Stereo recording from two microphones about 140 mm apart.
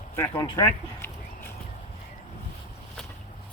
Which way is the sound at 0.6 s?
15° left (ahead or behind).